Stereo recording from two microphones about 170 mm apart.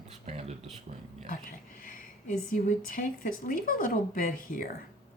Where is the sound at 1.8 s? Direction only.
55° left (ahead or behind).